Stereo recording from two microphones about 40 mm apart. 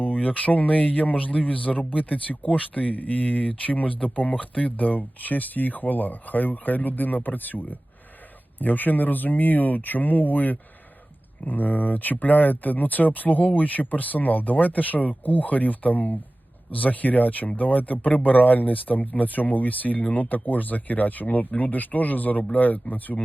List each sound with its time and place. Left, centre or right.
0.0 s speech: left